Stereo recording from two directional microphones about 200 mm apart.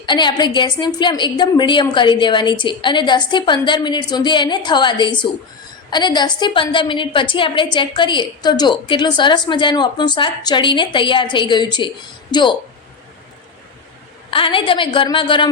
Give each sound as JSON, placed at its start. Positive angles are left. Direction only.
{"t": 0.0, "sound": "a woman's voice", "side_deg": 25}
{"t": 14.3, "sound": "a woman's voice", "side_deg": 25}